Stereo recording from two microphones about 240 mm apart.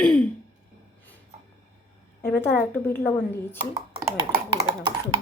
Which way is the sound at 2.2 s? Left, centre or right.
Centre.